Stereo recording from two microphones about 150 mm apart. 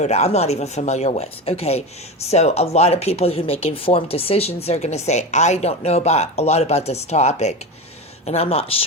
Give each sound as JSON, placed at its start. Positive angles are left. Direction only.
{"t": 0.0, "sound": "speech", "side_deg": 45}